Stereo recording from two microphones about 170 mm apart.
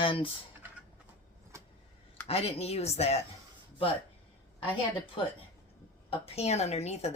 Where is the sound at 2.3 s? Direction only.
35° left (ahead or behind).